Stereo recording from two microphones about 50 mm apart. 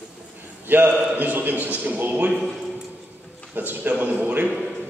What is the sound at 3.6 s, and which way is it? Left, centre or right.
Speech, right.